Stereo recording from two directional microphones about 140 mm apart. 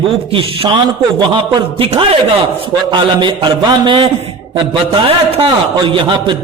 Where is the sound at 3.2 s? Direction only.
35° right (ahead or behind).